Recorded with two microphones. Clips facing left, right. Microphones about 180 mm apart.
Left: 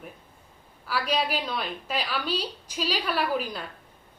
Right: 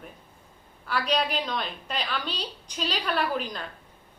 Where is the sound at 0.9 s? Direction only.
5° left (ahead or behind).